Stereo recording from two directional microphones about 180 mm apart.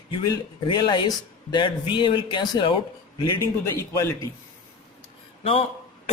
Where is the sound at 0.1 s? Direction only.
25° left (ahead or behind).